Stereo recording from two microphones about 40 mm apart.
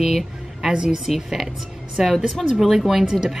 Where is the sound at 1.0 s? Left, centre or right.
Centre.